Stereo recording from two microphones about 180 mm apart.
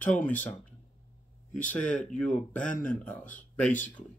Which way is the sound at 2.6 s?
45° left (ahead or behind).